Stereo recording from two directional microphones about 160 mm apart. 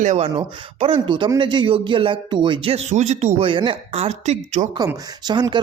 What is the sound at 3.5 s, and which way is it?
Speech, 30° right (ahead or behind).